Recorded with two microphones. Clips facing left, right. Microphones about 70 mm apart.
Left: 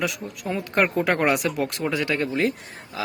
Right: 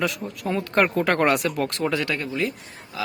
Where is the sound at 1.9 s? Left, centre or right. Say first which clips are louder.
Left 1 dB; left.